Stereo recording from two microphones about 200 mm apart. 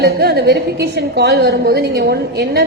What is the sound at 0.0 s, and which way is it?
A woman's voice, 55° right (ahead or behind).